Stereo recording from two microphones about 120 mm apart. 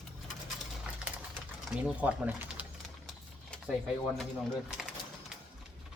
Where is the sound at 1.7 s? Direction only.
10° right (ahead or behind).